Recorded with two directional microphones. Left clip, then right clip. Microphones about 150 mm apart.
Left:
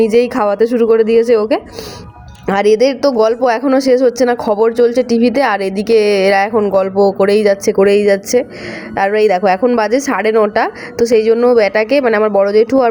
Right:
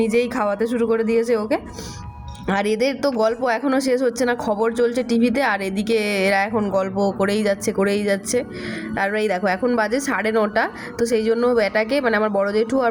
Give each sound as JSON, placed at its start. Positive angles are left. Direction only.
{"t": 0.0, "sound": "speech", "side_deg": 20}